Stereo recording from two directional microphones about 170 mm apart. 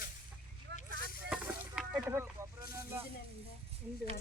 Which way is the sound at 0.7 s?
90° right.